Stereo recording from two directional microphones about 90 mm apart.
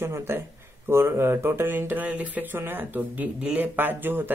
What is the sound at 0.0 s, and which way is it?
Speech, 30° right (ahead or behind).